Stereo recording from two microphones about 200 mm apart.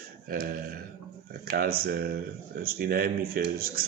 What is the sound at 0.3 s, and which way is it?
Speech, 45° right (ahead or behind).